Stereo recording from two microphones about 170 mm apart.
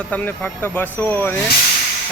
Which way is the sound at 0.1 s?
10° left (ahead or behind).